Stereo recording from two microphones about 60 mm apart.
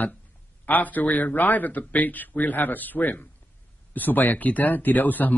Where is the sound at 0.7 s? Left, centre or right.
Left.